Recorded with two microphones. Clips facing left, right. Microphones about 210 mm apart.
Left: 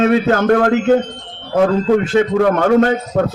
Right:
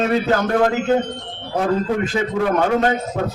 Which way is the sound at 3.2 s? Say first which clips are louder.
Left 6 dB; 50° left (ahead or behind).